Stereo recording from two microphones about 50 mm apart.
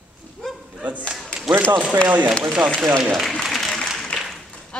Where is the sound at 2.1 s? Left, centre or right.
Right.